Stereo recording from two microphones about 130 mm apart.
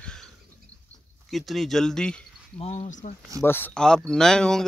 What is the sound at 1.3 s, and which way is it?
Speech, centre (ahead or behind).